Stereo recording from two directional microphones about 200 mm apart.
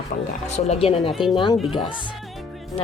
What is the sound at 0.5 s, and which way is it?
Speech, 30° left (ahead or behind).